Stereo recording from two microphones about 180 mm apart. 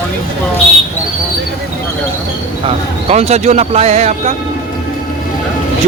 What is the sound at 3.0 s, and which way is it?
Speech, 35° right (ahead or behind).